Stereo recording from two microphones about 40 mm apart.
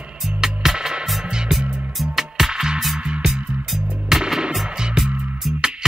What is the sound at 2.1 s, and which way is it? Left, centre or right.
Music, centre.